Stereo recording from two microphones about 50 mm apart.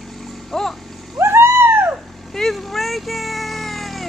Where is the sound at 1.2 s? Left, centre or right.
Right.